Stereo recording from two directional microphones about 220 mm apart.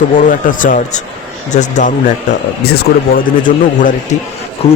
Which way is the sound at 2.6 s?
45° left (ahead or behind).